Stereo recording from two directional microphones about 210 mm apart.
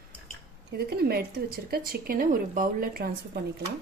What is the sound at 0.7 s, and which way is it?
A woman's voice, 50° right (ahead or behind).